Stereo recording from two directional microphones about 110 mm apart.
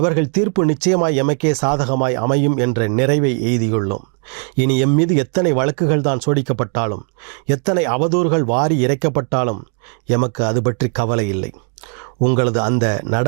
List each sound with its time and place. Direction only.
0.0 s speech: 15° right (ahead or behind)